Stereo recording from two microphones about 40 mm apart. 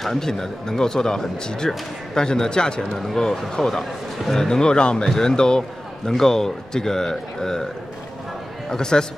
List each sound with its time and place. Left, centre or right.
0.0 s a man's voice: centre
8.6 s a man's voice: centre